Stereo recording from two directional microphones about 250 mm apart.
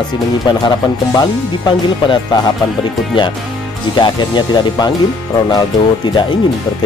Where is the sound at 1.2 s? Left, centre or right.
Centre.